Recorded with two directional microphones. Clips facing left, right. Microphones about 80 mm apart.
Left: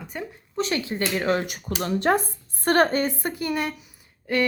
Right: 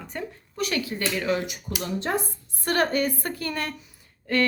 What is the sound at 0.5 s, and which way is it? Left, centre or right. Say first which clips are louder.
Speech: left 2 dB; left.